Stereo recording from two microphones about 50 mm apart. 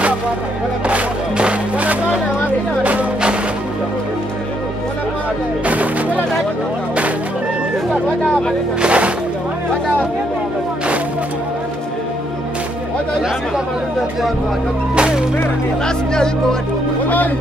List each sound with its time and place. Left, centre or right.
0.8 s music: right
5.7 s music: right
8.8 s speech: right
15.0 s speech: centre